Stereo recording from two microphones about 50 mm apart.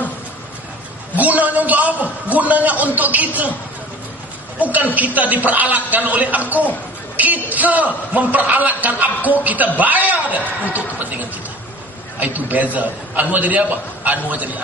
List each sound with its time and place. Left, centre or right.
1.1 s a man's voice: right
4.7 s a man's voice: right